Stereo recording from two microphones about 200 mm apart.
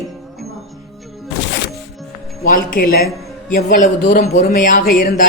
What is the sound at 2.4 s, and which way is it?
A man's voice, 45° left (ahead or behind).